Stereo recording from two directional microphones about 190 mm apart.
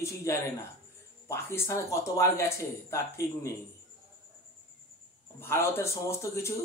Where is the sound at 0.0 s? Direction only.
15° left (ahead or behind).